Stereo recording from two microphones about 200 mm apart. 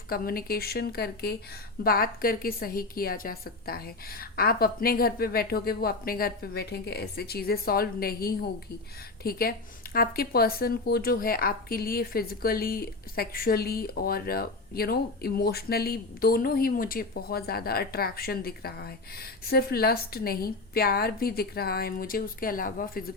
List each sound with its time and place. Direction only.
0.1 s speech: 50° left (ahead or behind)